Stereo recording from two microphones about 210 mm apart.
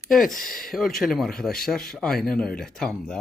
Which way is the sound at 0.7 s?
Centre (ahead or behind).